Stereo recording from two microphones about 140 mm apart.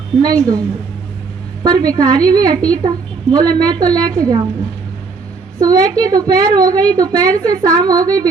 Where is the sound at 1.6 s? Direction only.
30° right (ahead or behind).